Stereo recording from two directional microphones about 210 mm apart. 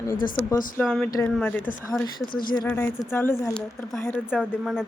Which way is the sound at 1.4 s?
10° left (ahead or behind).